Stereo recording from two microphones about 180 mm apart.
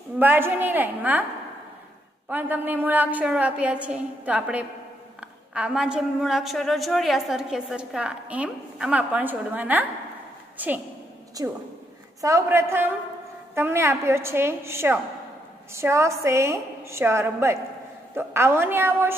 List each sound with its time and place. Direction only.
0.2 s a woman's voice: 10° right (ahead or behind)
2.2 s a woman's voice: 10° right (ahead or behind)
11.4 s a woman's voice: 20° right (ahead or behind)